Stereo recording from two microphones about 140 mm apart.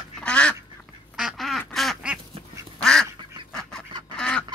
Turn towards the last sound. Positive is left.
turn(degrees=10)  # may be behind; listen again after turning